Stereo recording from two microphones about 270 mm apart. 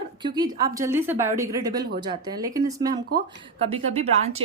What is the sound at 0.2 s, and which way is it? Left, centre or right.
A woman's voice, centre.